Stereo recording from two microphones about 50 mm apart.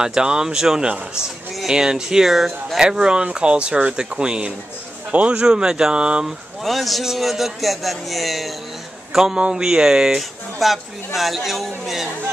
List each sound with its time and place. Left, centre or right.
0.0 s speech: centre
6.2 s a man's voice: centre
10.6 s a man's voice: centre